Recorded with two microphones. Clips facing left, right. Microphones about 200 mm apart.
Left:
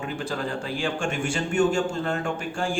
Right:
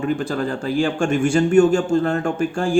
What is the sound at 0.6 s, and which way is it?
A man's voice, 45° right (ahead or behind).